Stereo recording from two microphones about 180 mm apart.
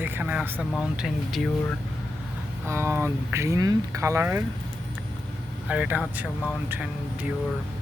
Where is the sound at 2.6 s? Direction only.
15° right (ahead or behind).